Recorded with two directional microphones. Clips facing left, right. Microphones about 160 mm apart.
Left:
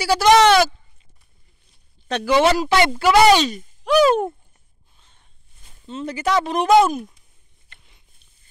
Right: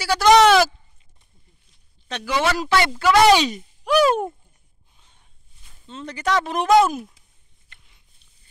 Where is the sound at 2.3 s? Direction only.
20° left (ahead or behind); by 3.4 s 5° left (ahead or behind).